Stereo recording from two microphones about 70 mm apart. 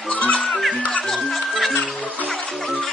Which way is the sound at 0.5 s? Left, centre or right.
Centre.